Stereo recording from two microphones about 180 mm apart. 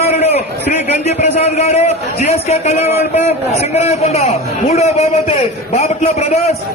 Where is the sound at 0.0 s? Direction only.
35° left (ahead or behind).